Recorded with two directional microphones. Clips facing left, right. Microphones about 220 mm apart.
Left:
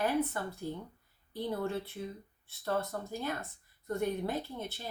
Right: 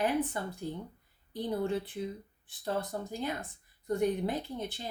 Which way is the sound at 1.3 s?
15° right (ahead or behind).